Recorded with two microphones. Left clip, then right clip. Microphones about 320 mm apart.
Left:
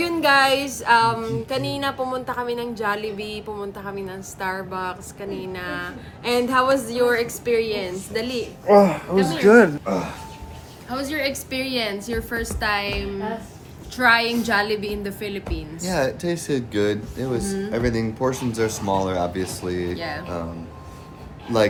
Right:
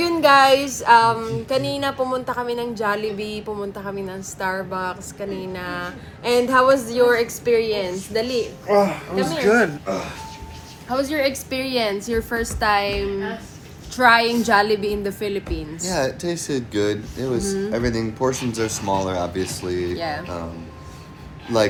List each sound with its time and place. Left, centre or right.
0.0 s music: centre
8.6 s speech: left
10.8 s a woman's voice: centre
13.9 s music: centre
15.9 s speech: centre
20.0 s music: centre